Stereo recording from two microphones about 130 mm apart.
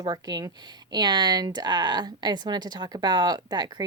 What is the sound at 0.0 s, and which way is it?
Speech, 30° right (ahead or behind).